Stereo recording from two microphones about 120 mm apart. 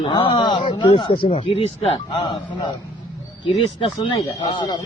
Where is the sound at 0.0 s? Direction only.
40° left (ahead or behind).